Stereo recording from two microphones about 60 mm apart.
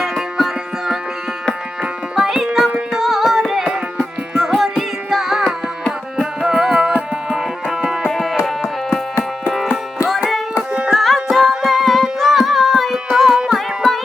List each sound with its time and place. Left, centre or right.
0.0 s music: centre
8.9 s music: left
10.7 s music: centre
11.0 s music: centre